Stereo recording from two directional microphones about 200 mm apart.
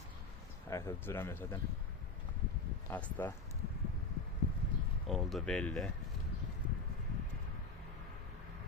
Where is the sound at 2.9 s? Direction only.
10° left (ahead or behind).